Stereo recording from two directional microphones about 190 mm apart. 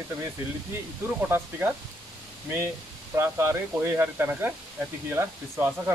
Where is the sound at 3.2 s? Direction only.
15° right (ahead or behind).